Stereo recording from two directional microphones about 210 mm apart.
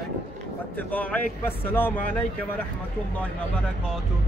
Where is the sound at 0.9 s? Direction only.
5° left (ahead or behind).